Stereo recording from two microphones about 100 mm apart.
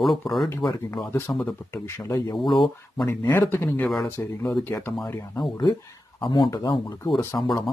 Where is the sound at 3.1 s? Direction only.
25° left (ahead or behind).